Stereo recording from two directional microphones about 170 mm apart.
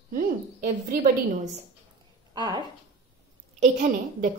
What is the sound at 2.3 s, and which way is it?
Speech, 25° right (ahead or behind).